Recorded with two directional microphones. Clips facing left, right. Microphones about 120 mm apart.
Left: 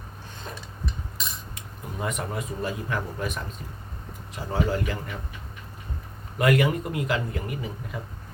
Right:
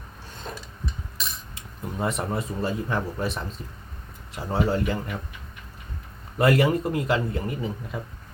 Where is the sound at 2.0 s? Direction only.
30° right (ahead or behind).